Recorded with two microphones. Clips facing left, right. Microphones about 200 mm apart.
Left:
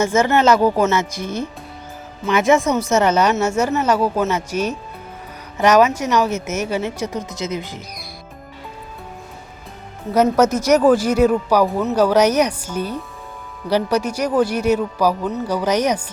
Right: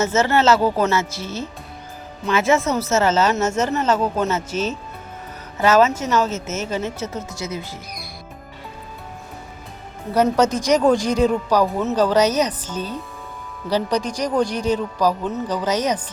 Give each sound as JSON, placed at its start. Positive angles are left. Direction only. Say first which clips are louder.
{"t": 0.0, "sound": "speech", "louder": "left 2 dB", "side_deg": 15}
{"t": 10.2, "sound": "speech", "louder": "left 3 dB", "side_deg": 10}